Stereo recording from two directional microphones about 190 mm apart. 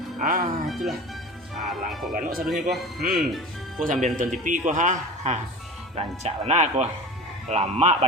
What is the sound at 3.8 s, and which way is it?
A man's voice, 45° right (ahead or behind).